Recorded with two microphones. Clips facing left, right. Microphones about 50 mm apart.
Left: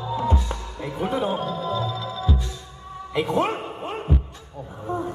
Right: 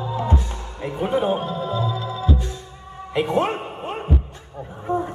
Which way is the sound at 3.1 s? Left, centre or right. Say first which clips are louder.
Right 2 dB; right.